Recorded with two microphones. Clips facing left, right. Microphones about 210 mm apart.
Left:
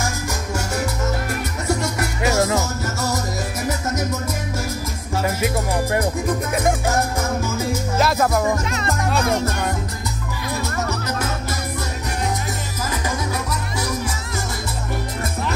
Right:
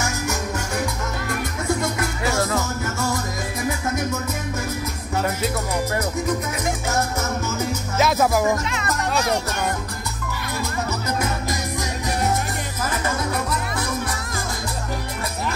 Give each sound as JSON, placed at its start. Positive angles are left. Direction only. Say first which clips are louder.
{"t": 2.2, "sound": "music", "louder": "left 4 dB", "side_deg": 25}
{"t": 8.0, "sound": "music", "louder": "right 1 dB", "side_deg": 0}